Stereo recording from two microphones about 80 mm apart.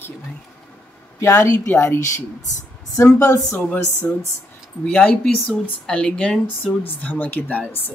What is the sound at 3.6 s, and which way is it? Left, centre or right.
Speech, left.